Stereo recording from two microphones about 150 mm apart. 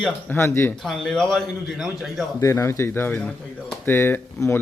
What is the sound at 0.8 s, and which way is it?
A man's voice, 5° left (ahead or behind).